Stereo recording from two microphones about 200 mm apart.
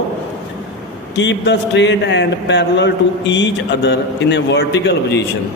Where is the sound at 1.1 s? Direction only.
60° left (ahead or behind).